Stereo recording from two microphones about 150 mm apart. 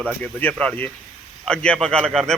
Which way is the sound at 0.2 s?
10° left (ahead or behind).